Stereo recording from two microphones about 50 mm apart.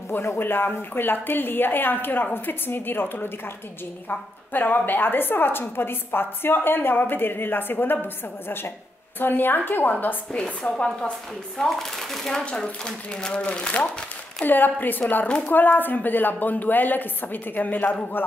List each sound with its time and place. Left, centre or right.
0.2 s a woman's voice: left
10.6 s speech: left
11.7 s speech: centre
12.4 s speech: centre
14.4 s a woman's voice: left
15.2 s speech: left
15.5 s a woman's voice: left